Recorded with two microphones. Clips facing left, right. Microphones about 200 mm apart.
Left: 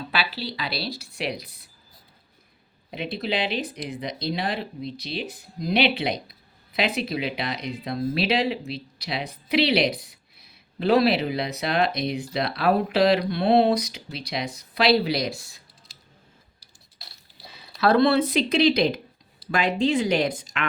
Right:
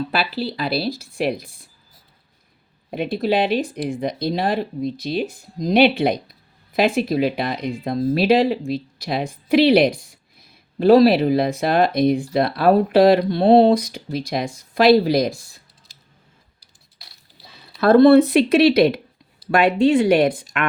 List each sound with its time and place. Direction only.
0.1 s speech: 50° right (ahead or behind)
2.9 s speech: 50° right (ahead or behind)
17.7 s speech: 50° right (ahead or behind)